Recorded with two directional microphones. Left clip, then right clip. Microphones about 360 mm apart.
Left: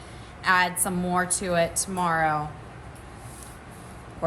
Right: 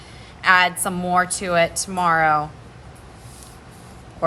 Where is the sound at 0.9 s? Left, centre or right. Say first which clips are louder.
Right 6 dB; centre.